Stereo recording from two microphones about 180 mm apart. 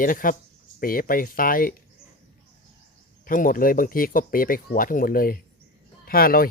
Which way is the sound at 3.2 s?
50° left (ahead or behind).